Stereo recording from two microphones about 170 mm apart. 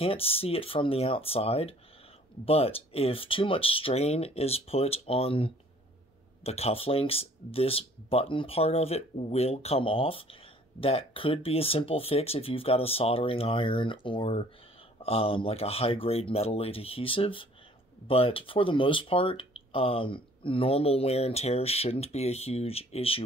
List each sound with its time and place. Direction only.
0.0 s speech: 35° left (ahead or behind)